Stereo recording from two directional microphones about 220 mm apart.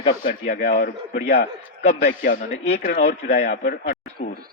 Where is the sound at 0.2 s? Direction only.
35° left (ahead or behind).